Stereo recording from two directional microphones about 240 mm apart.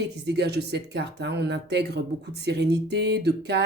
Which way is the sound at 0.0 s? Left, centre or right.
Right.